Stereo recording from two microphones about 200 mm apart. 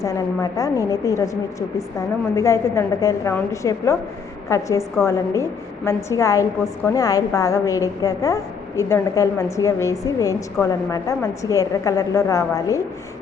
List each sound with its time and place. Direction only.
0.0 s a woman's voice: 15° left (ahead or behind)
2.3 s a woman's voice: 15° left (ahead or behind)